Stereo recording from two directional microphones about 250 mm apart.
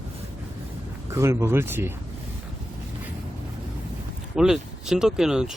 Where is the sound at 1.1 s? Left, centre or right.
Centre.